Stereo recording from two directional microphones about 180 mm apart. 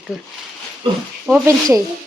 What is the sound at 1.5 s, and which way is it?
Speech, 20° right (ahead or behind).